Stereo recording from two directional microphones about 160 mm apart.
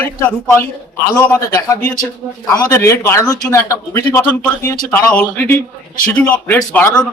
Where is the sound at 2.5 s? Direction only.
15° left (ahead or behind).